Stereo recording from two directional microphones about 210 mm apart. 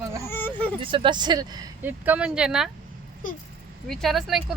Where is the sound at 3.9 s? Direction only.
Centre (ahead or behind).